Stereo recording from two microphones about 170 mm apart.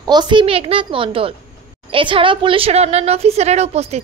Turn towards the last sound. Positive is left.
turn(degrees=-40)  # may be behind; listen again after turning